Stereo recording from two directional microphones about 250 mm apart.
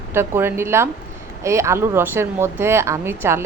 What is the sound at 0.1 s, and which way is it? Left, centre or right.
Speech, centre.